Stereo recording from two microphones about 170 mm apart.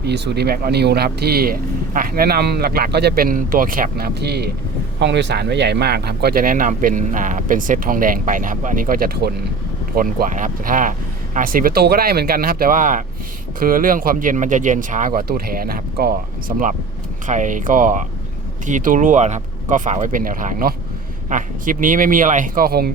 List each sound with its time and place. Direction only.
0.0 s speech: 75° right (ahead or behind)
4.9 s speech: 90° right; by 22.9 s 60° right (ahead or behind)